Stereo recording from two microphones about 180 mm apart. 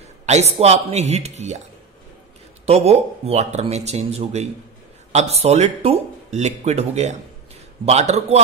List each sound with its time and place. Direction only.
0.3 s speech: 35° right (ahead or behind)
2.6 s speech: 35° right (ahead or behind)